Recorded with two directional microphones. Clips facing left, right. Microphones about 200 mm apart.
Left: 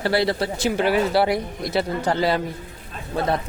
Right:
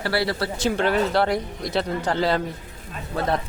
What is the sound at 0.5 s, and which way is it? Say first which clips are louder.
Speech: even; 10° left (ahead or behind).